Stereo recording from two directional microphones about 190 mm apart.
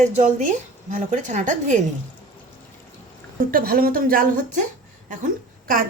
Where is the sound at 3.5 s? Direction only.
50° right (ahead or behind).